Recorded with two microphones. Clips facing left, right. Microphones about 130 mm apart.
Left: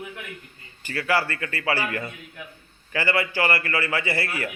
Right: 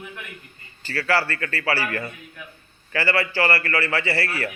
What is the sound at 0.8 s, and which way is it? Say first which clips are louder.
A man's voice: right 1 dB; 15° left (ahead or behind).